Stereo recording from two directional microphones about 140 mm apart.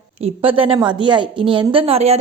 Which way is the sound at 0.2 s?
45° right (ahead or behind).